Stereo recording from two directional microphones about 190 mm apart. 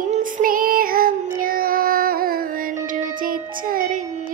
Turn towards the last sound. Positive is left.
turn(degrees=-45)  # may be behind; listen again after turning